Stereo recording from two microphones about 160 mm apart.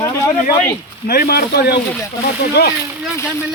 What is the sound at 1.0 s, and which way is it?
Speech, 75° left (ahead or behind).